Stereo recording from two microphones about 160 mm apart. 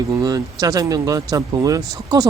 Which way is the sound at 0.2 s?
25° right (ahead or behind).